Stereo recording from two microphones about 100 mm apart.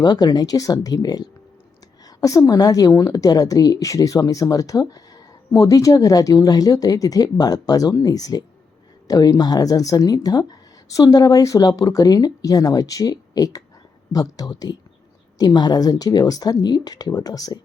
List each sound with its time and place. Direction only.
0.0 s a woman's voice: 45° left (ahead or behind)